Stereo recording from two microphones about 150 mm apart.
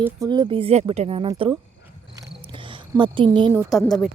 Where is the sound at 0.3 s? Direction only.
30° right (ahead or behind).